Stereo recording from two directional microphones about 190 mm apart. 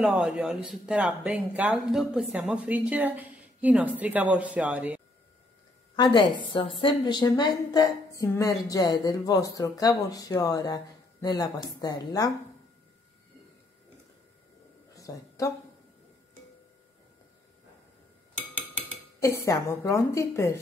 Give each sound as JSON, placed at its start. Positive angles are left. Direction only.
{"t": 0.0, "sound": "speech", "side_deg": -5}
{"t": 5.9, "sound": "a woman's voice", "side_deg": 25}
{"t": 15.0, "sound": "a sound", "side_deg": 15}
{"t": 18.8, "sound": "speech", "side_deg": 15}